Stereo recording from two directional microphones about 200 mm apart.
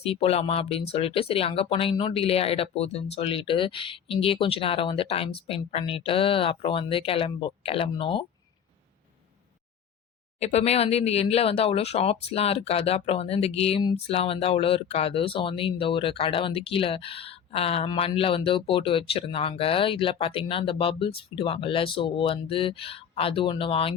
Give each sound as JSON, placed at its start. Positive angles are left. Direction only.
{"t": 0.0, "sound": "speech", "side_deg": 30}
{"t": 10.4, "sound": "speech", "side_deg": 30}